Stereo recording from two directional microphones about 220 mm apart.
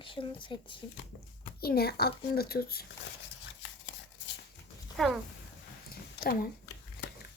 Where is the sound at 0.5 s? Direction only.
20° left (ahead or behind).